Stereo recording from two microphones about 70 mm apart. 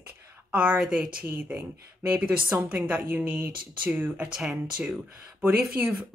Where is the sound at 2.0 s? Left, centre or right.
Right.